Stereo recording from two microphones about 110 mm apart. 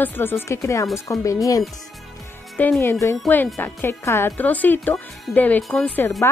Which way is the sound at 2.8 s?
25° left (ahead or behind).